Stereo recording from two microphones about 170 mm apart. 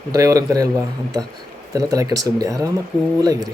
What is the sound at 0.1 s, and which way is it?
Speech, 20° right (ahead or behind).